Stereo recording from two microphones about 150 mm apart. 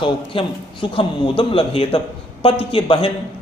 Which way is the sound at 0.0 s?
35° left (ahead or behind).